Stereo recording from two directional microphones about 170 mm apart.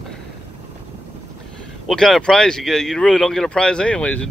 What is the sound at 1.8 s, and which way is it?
Speech, centre (ahead or behind).